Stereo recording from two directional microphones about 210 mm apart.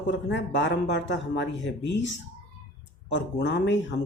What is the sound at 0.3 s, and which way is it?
Speech, 55° left (ahead or behind).